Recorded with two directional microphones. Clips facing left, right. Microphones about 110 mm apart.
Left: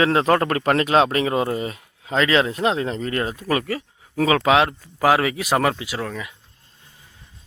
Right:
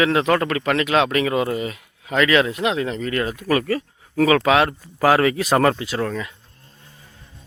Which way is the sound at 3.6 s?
15° left (ahead or behind).